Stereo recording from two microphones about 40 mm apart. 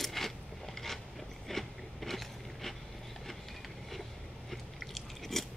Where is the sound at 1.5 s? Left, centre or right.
Centre.